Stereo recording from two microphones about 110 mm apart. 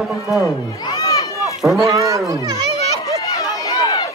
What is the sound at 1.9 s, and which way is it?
Speech, 30° right (ahead or behind).